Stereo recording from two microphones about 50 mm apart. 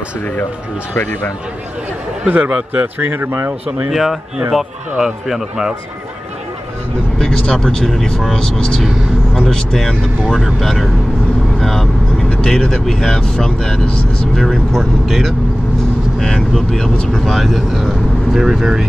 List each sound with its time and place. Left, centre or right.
2.2 s speech: right
3.0 s speech: right
3.9 s a man's voice: centre
7.2 s speech: left; by 10.9 s centre
11.6 s vehicle: centre
12.4 s speech: centre
14.4 s speech: centre
16.9 s speech: left
17.2 s speech: centre